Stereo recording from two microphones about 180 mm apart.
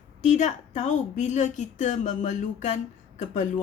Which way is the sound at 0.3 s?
40° left (ahead or behind).